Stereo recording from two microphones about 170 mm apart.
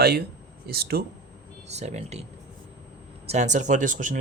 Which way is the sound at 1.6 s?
40° right (ahead or behind).